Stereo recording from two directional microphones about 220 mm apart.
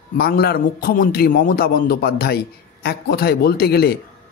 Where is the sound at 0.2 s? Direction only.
45° left (ahead or behind).